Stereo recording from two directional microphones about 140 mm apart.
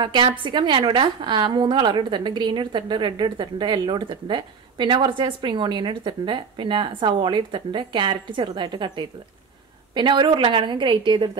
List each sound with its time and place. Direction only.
0.0 s a woman's voice: 35° right (ahead or behind)